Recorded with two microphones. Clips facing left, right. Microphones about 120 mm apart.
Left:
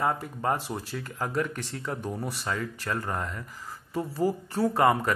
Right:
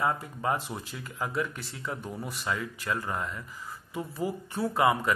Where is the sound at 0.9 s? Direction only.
45° left (ahead or behind).